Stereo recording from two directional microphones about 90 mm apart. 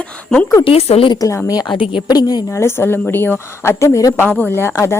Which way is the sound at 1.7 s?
75° left (ahead or behind).